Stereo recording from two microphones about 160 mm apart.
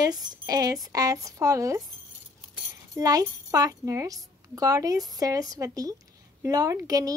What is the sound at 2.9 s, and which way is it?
Speech, 20° right (ahead or behind).